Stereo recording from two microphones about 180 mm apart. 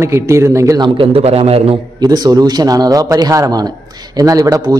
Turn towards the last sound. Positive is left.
turn(degrees=-20)  # may be behind; listen again after turning